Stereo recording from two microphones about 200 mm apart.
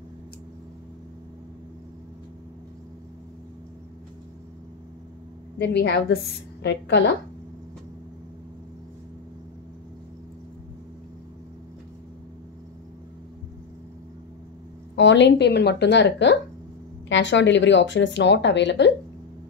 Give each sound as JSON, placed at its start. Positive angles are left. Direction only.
{"t": 5.6, "sound": "speech", "side_deg": 55}
{"t": 15.0, "sound": "speech", "side_deg": 65}